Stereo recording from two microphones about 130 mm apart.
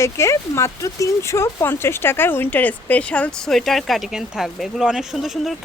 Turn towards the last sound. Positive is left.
turn(degrees=0)  # may be behind; listen again after turning